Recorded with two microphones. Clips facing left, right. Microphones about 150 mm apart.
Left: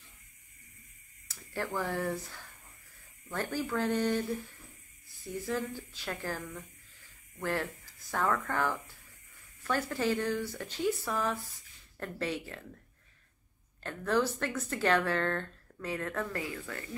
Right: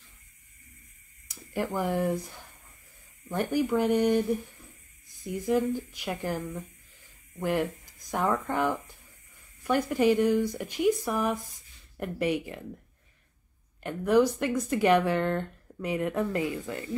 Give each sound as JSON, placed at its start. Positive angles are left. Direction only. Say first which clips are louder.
{"t": 1.2, "sound": "speech", "louder": "right 6 dB", "side_deg": -15}
{"t": 13.8, "sound": "speech", "louder": "right 7 dB", "side_deg": -15}